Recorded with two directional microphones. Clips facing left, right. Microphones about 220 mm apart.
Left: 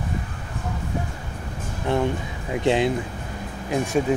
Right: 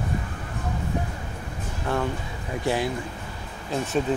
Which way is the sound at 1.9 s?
20° left (ahead or behind).